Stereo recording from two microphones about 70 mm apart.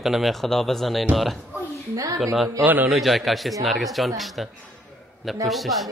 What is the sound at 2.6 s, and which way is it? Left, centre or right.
Speech, right.